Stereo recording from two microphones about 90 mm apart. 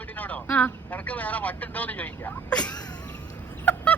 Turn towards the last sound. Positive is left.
turn(degrees=15)  # may be behind; listen again after turning